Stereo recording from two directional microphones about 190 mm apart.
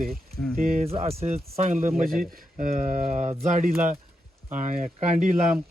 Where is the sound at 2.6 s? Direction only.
45° right (ahead or behind).